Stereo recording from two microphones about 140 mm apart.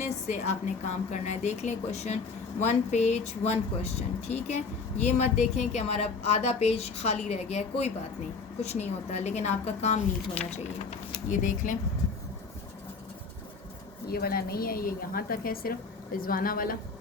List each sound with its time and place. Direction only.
0.0 s a woman's voice: 55° left (ahead or behind)
11.3 s speech: 70° left (ahead or behind)
14.1 s a woman's voice: 90° left